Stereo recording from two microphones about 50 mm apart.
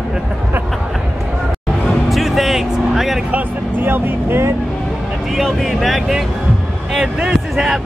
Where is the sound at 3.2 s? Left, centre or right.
Right.